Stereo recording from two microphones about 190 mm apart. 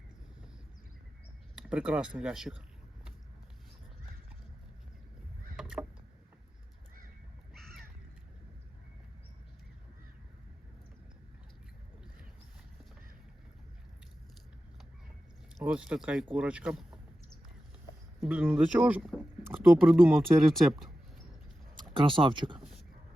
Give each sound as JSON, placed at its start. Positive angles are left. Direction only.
{"t": 1.5, "sound": "speech", "side_deg": -5}
{"t": 5.5, "sound": "rowboat", "side_deg": -5}
{"t": 15.5, "sound": "speech", "side_deg": -5}
{"t": 18.2, "sound": "speech", "side_deg": -5}
{"t": 21.9, "sound": "speech", "side_deg": -25}